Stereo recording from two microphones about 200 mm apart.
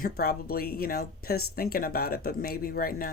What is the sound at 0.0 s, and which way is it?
Speech, 50° left (ahead or behind).